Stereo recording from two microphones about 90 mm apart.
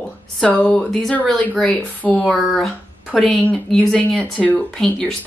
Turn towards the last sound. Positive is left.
turn(degrees=5)  # may be behind; listen again after turning